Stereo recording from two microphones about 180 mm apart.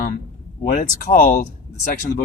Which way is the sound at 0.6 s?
50° left (ahead or behind).